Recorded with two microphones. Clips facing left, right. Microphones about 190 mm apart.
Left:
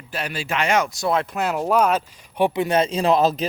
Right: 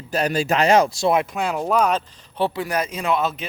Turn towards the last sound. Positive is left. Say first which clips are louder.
# left 5 dB
turn(degrees=35)  # may be behind; listen again after turning